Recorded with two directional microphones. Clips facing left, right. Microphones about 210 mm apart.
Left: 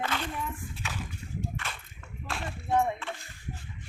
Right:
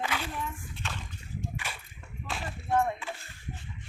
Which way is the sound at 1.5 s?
10° right (ahead or behind).